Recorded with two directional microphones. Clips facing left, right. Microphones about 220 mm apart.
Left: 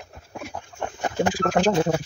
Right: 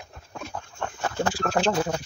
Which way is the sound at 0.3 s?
15° left (ahead or behind).